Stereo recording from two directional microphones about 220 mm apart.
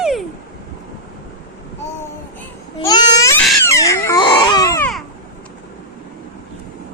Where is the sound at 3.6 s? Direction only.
15° left (ahead or behind).